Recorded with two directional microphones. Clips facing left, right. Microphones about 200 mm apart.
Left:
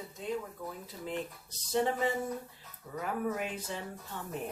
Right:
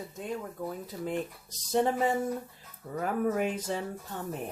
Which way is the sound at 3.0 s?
45° right (ahead or behind).